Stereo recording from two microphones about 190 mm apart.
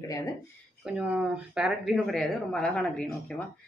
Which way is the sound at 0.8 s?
5° right (ahead or behind).